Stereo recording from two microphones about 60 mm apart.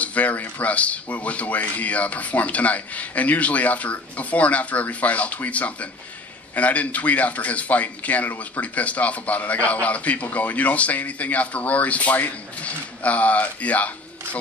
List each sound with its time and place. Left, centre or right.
0.0 s speech: left